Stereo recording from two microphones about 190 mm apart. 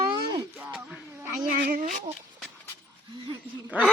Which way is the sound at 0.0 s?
25° right (ahead or behind).